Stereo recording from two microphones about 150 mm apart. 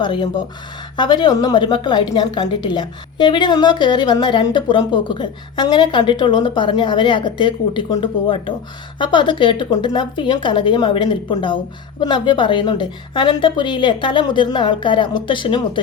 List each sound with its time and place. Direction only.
0.0 s a woman's voice: 35° left (ahead or behind)